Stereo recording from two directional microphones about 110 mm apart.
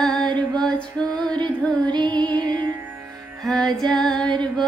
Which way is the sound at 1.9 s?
45° right (ahead or behind).